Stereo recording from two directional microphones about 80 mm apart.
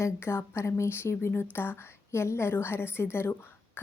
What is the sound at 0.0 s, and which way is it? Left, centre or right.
A woman's voice, left.